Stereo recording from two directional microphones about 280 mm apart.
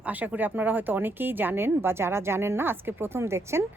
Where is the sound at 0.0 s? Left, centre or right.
Centre.